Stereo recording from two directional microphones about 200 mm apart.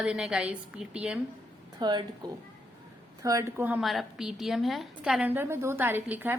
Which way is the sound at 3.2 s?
15° right (ahead or behind).